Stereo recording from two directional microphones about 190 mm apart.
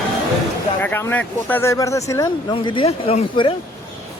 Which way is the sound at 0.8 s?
10° left (ahead or behind).